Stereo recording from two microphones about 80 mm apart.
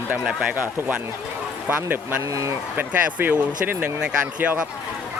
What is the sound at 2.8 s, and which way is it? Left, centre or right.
Speech, right.